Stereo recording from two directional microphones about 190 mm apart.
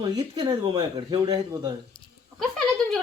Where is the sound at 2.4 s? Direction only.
Centre (ahead or behind).